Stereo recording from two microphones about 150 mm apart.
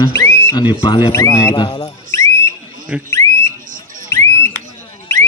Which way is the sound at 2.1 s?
20° left (ahead or behind).